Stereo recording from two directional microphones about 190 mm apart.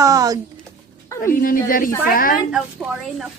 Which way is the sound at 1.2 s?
45° left (ahead or behind).